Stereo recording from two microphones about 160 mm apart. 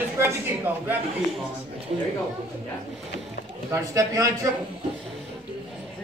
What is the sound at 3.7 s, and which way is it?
Speech, 20° right (ahead or behind).